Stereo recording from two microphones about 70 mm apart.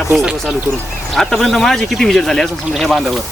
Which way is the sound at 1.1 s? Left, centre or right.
Centre.